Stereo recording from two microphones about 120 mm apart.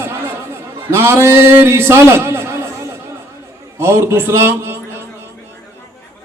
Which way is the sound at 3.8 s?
20° right (ahead or behind).